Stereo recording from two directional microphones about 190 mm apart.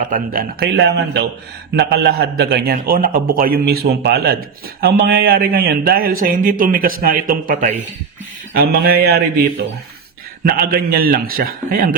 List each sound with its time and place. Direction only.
0.1 s a man's voice: 55° right (ahead or behind)